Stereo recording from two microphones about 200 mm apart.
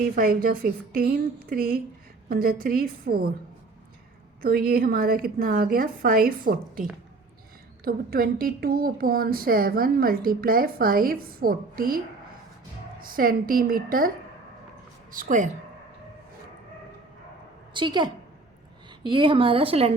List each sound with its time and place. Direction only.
0.2 s a woman's voice: 45° right (ahead or behind)
4.4 s a woman's voice: 50° right (ahead or behind)
7.9 s a woman's voice: 50° right (ahead or behind)
13.0 s a woman's voice: 45° right (ahead or behind)
15.1 s a woman's voice: 40° right (ahead or behind)
17.7 s a woman's voice: 25° right (ahead or behind)